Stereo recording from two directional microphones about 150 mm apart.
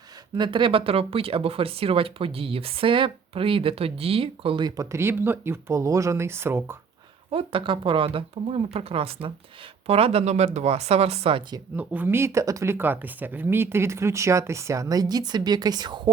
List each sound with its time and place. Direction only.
0.3 s speech: 30° right (ahead or behind); by 6.7 s 15° right (ahead or behind)
7.3 s speech: 40° right (ahead or behind)
11.8 s speech: 10° right (ahead or behind); by 16.0 s 30° right (ahead or behind)